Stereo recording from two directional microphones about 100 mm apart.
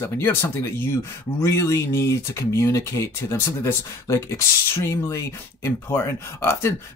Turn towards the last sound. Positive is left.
turn(degrees=25)  # may be behind; listen again after turning